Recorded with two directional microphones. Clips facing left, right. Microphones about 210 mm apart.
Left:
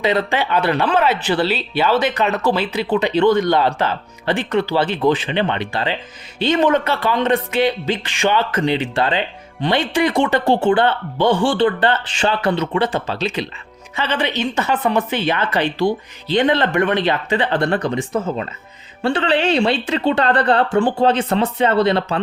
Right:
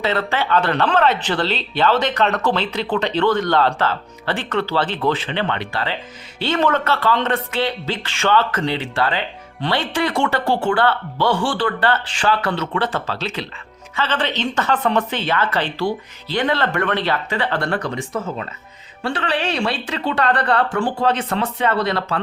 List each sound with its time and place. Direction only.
0.0 s speech: 15° left (ahead or behind)